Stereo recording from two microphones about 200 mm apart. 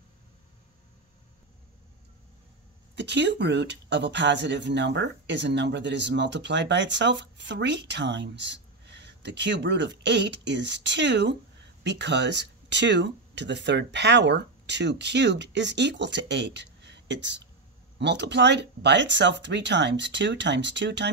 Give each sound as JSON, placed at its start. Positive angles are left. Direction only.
{"t": 3.0, "sound": "speech", "side_deg": -60}